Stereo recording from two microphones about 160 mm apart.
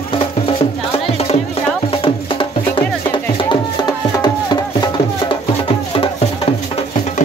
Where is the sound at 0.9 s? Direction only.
40° left (ahead or behind).